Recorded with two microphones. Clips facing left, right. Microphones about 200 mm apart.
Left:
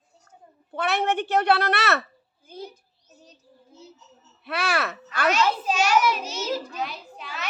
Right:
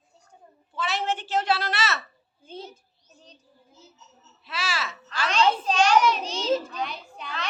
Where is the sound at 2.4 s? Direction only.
25° right (ahead or behind).